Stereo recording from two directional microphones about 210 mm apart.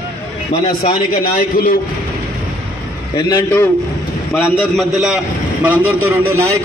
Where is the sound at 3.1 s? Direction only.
20° left (ahead or behind).